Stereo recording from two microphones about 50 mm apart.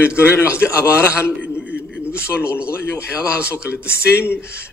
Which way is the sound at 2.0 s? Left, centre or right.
Left.